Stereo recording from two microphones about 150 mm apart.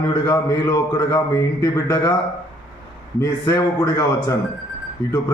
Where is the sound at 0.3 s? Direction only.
30° left (ahead or behind).